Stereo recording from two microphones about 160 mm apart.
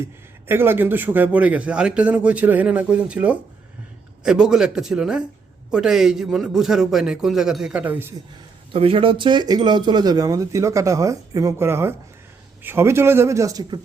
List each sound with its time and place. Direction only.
0.0 s a man's voice: 15° right (ahead or behind)
8.7 s a man's voice: 35° right (ahead or behind)